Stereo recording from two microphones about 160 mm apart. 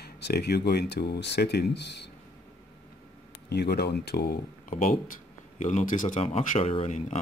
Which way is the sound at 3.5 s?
90° left.